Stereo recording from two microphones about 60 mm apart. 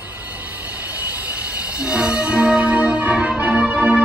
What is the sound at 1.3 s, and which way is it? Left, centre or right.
Music, centre.